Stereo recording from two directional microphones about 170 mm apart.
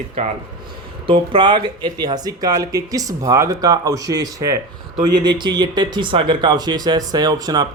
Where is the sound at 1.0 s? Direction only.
30° right (ahead or behind).